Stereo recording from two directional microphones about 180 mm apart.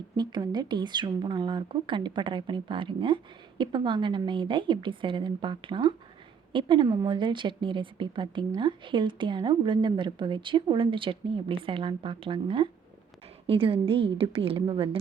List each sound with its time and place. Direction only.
0.2 s a woman's voice: 25° right (ahead or behind)